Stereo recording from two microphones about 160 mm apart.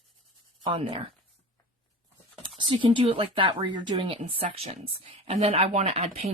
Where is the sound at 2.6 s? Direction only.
30° right (ahead or behind).